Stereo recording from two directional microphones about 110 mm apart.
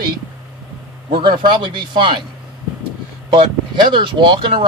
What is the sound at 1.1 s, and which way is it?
Speech, 45° right (ahead or behind).